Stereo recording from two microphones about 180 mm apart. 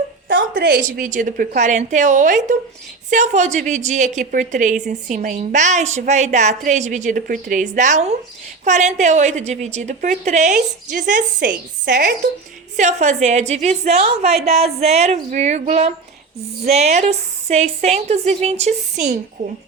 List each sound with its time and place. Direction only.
0.3 s a woman's voice: 60° right (ahead or behind); by 19.2 s 40° right (ahead or behind)